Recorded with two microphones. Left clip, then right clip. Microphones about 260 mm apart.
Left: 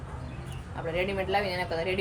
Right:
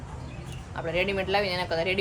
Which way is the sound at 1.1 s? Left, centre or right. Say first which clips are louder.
Right 2 dB; centre.